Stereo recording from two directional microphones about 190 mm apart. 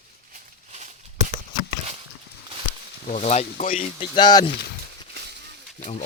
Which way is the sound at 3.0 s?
35° left (ahead or behind).